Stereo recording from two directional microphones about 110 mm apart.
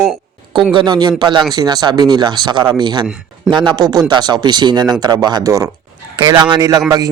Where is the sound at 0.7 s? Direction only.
40° right (ahead or behind).